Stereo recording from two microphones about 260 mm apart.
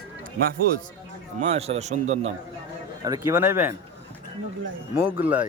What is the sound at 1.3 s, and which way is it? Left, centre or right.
Speech, right.